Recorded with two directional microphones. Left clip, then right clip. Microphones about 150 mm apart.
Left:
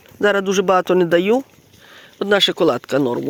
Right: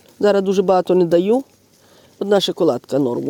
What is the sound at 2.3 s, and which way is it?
Speech, 25° right (ahead or behind).